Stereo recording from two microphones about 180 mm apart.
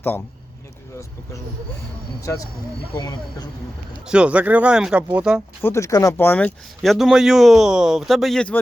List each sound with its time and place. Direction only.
2.2 s speech: 20° left (ahead or behind)
4.0 s speech: 5° right (ahead or behind)
5.6 s speech: 15° left (ahead or behind)